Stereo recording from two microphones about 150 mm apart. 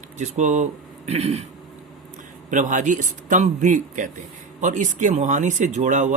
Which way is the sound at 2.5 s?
60° right (ahead or behind).